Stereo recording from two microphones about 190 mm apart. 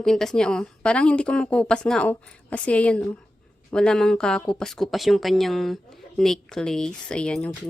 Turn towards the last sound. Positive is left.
turn(degrees=5)  # may be behind; listen again after turning